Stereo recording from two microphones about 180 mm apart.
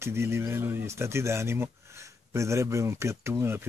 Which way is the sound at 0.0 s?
15° right (ahead or behind).